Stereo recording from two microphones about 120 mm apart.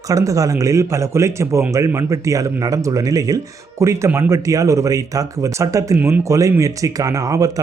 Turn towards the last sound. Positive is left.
turn(degrees=-30)  # may be behind; listen again after turning